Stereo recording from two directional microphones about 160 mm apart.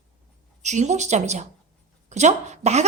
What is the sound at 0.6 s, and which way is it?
Speech, 45° right (ahead or behind).